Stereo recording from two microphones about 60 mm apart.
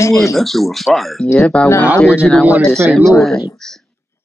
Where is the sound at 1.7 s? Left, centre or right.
Left.